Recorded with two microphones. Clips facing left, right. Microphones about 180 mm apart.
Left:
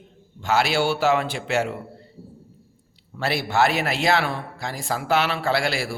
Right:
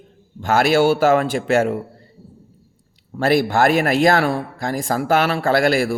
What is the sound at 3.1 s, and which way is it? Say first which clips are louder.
A man's voice: right 6 dB; 50° right (ahead or behind).